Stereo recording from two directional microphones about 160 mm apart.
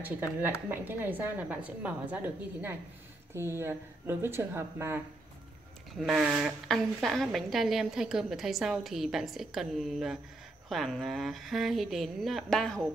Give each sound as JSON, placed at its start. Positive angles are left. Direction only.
{"t": 0.0, "sound": "speech", "side_deg": -10}
{"t": 5.9, "sound": "a woman's voice", "side_deg": 0}